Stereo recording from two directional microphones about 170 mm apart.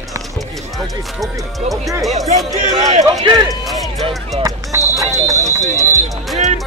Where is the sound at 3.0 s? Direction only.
20° right (ahead or behind).